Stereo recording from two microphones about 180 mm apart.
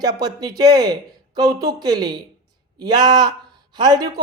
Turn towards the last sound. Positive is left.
turn(degrees=-20)  # may be behind; listen again after turning